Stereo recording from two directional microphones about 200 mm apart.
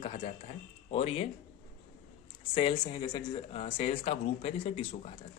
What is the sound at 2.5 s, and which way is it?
Speech, 25° left (ahead or behind).